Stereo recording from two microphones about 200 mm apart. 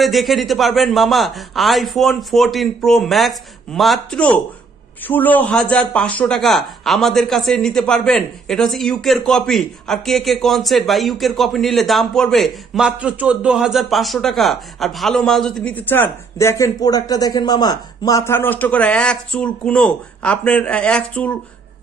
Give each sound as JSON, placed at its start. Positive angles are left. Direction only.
{"t": 0.0, "sound": "speech", "side_deg": 0}